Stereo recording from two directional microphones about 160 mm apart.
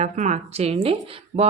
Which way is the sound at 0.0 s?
45° right (ahead or behind).